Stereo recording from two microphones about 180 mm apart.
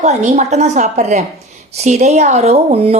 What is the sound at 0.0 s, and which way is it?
Speech, 40° right (ahead or behind).